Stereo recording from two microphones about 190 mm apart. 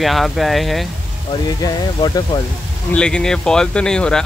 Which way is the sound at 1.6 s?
20° left (ahead or behind).